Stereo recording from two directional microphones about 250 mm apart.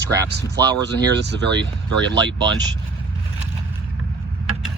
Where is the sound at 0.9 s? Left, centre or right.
Right.